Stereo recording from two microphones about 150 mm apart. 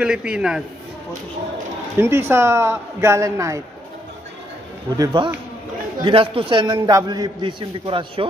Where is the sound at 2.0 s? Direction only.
15° right (ahead or behind).